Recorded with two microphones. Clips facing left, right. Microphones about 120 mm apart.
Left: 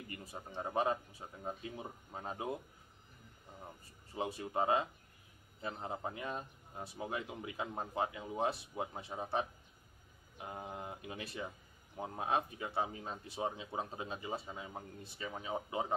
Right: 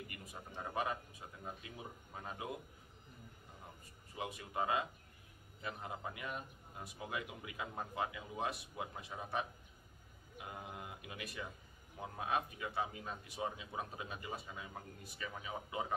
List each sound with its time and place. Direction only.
0.1 s speech: 30° left (ahead or behind)
4.1 s a man's voice: 30° left (ahead or behind)